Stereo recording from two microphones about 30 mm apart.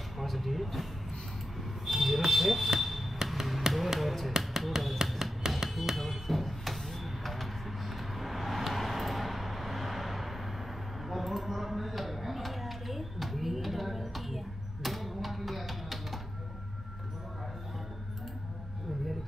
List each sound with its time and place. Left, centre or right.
0.2 s a sound: centre
1.9 s basketball bounce: centre
3.7 s finger snapping: centre
5.0 s music: centre
5.6 s music: centre
5.9 s a sound: centre